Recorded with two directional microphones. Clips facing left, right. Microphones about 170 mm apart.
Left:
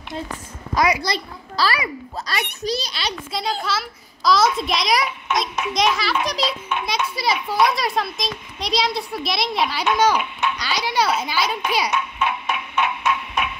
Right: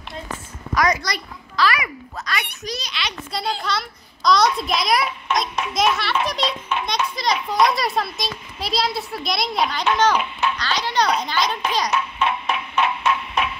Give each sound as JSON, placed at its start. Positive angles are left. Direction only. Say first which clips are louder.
{"t": 1.0, "sound": "a child's voice", "louder": "left 4 dB", "side_deg": 30}
{"t": 3.3, "sound": "a woman's voice", "louder": "even", "side_deg": 0}